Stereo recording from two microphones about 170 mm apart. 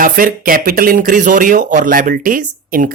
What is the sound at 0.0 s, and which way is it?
Speech, 55° right (ahead or behind).